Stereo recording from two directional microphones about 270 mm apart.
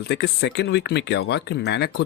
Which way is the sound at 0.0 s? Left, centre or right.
Left.